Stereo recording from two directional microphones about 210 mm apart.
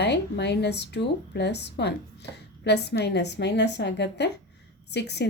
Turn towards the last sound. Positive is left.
turn(degrees=55)  # may be behind; listen again after turning